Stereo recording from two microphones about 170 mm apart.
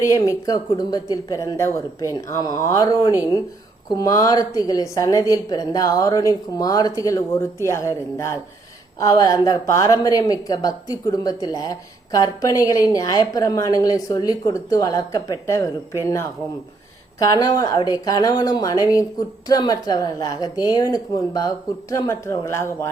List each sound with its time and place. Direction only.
0.1 s a woman's voice: 20° left (ahead or behind)